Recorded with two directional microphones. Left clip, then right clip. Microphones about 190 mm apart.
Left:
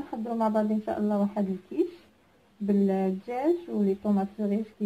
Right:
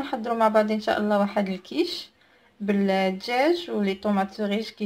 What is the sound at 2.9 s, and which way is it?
Speech, 15° right (ahead or behind).